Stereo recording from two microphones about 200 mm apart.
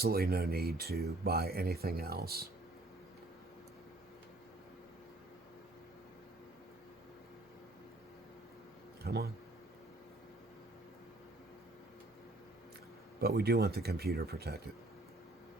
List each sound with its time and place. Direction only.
0.0 s speech: 50° right (ahead or behind)
9.0 s speech: 50° right (ahead or behind)
13.1 s speech: 50° right (ahead or behind)